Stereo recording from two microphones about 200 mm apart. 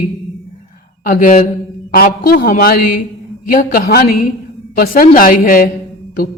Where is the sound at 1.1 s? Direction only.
40° left (ahead or behind).